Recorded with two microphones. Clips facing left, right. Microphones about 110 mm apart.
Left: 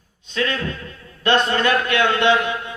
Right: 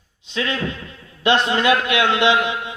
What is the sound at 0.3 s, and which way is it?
A man's voice, 20° right (ahead or behind).